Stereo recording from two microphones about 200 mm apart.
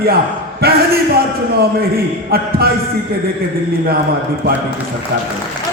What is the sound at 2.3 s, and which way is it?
Speech, 50° right (ahead or behind).